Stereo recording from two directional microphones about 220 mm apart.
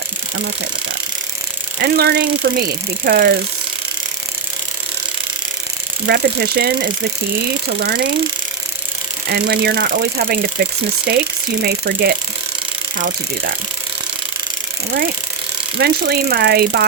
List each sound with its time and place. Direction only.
1.8 s speech: 45° right (ahead or behind)
6.1 s speech: 45° right (ahead or behind)
9.3 s speech: 45° right (ahead or behind)
15.8 s speech: 45° right (ahead or behind)